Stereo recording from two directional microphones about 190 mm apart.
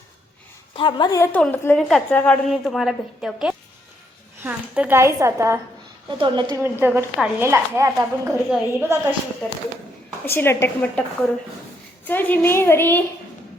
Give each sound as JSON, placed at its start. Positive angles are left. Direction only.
{"t": 0.8, "sound": "a woman's voice", "side_deg": 25}
{"t": 6.1, "sound": "speech", "side_deg": -25}
{"t": 6.6, "sound": "a woman's voice", "side_deg": -10}
{"t": 8.3, "sound": "a woman's voice", "side_deg": 0}
{"t": 10.2, "sound": "a woman's voice", "side_deg": 10}
{"t": 12.0, "sound": "a woman's voice", "side_deg": 10}